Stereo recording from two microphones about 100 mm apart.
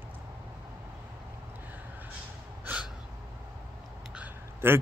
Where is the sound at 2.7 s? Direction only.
20° right (ahead or behind).